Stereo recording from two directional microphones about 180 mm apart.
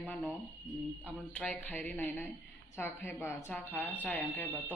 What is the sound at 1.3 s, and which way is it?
Speech, 10° left (ahead or behind).